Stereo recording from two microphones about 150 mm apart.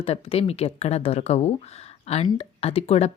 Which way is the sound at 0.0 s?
40° left (ahead or behind).